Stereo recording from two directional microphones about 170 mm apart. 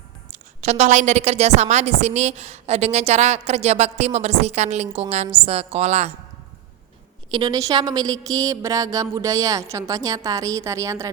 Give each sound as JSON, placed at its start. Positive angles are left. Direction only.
{"t": 0.3, "sound": "a woman's voice", "side_deg": -40}
{"t": 7.3, "sound": "a woman's voice", "side_deg": -25}